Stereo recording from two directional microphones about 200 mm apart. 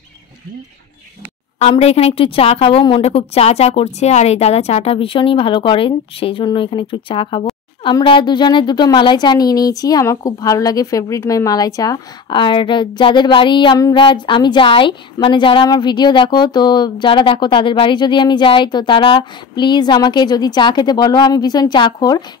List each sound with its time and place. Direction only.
1.6 s a woman's voice: 30° left (ahead or behind)